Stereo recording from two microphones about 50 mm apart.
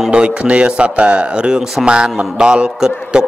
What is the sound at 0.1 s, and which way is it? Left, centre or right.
A man's voice, centre.